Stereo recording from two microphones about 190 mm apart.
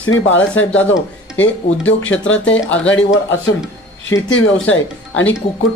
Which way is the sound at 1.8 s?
80° left.